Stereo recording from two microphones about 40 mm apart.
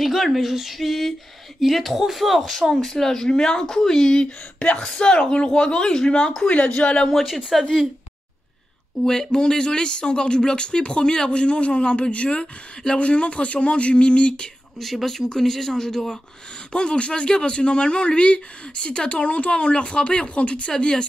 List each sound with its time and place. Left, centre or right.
0.0 s speech: centre; by 6.1 s left
6.4 s speech: left
7.5 s speech: centre
9.0 s speech: centre; by 14.5 s left
14.8 s speech: centre
16.7 s speech: left
20.7 s speech: centre